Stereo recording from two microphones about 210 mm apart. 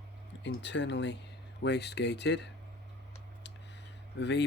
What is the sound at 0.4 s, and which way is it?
Speech, 60° left (ahead or behind).